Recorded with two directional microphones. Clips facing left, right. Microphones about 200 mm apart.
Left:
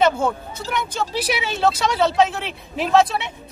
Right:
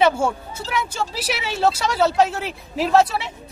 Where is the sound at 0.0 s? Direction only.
10° right (ahead or behind).